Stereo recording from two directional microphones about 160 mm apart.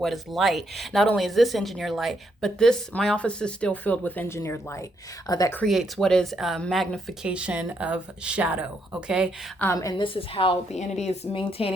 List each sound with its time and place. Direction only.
0.0 s speech: centre (ahead or behind); by 5.5 s 20° left (ahead or behind)
5.6 s speech: centre (ahead or behind)
9.7 s a woman's voice: 25° left (ahead or behind)
10.2 s speech: 35° left (ahead or behind)